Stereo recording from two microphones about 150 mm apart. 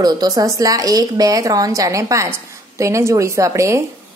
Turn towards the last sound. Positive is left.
turn(degrees=-20)  # may be behind; listen again after turning